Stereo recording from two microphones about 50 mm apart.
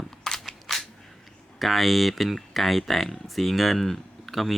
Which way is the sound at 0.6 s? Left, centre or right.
Centre.